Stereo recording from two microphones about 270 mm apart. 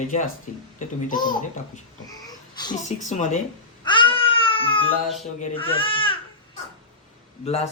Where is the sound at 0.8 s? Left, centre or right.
Left.